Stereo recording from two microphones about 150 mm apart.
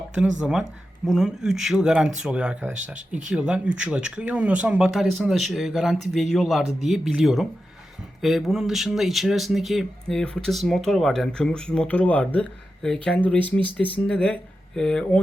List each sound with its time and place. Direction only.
0.1 s speech: 5° right (ahead or behind)
13.4 s speech: 35° right (ahead or behind)
14.1 s speech: 5° left (ahead or behind)